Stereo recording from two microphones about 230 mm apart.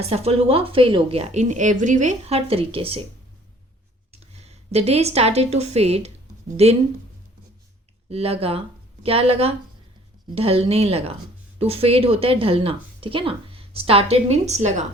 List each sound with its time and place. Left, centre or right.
0.1 s speech: right
4.1 s a woman's voice: right
8.1 s speech: right